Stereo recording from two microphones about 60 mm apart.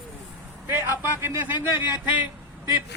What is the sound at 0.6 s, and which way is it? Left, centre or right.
A man's voice, right.